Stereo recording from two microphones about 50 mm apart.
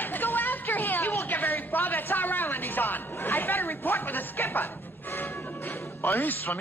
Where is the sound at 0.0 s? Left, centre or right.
Left.